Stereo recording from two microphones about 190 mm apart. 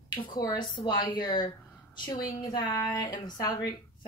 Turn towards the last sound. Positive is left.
turn(degrees=20)  # may be behind; listen again after turning